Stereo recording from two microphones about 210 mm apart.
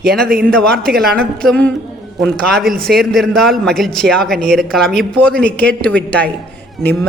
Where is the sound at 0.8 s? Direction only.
50° right (ahead or behind).